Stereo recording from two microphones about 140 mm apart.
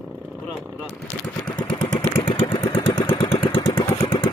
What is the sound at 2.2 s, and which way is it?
Vehicle, 35° left (ahead or behind).